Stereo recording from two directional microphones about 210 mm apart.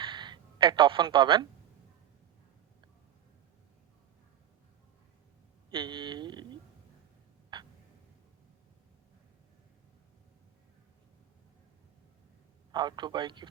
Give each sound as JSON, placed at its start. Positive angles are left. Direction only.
{"t": 0.0, "sound": "a sound", "side_deg": -20}
{"t": 5.7, "sound": "speech", "side_deg": -20}
{"t": 12.7, "sound": "speech", "side_deg": -20}